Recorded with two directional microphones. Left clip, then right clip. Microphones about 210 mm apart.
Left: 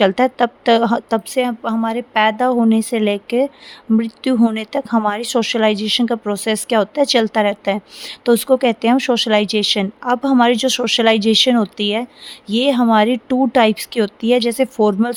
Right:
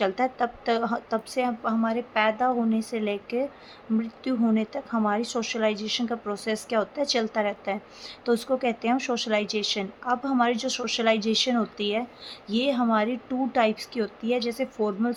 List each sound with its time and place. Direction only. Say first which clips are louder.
0.0 s speech: left 11 dB; 50° left (ahead or behind)